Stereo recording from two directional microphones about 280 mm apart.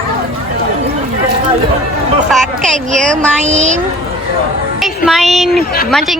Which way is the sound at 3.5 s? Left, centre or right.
Right.